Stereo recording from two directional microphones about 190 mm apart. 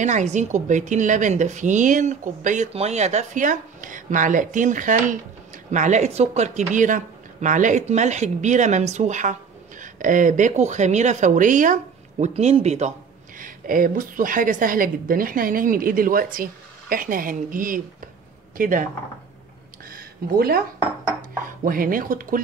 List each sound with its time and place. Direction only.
0.0 s speech: 40° right (ahead or behind)
13.4 s a woman's voice: 45° right (ahead or behind)
19.9 s a sound: 50° right (ahead or behind)
21.2 s a woman's voice: 50° right (ahead or behind)